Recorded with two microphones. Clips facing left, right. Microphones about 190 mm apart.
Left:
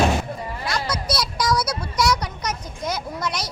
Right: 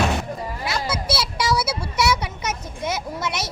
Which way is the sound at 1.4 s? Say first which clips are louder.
Left 1 dB; 5° right (ahead or behind).